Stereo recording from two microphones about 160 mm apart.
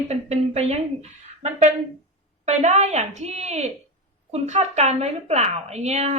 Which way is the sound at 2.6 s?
45° right (ahead or behind).